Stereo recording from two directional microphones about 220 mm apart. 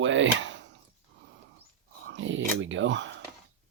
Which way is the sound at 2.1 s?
60° right (ahead or behind).